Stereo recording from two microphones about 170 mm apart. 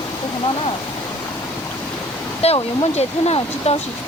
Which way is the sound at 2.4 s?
35° left (ahead or behind).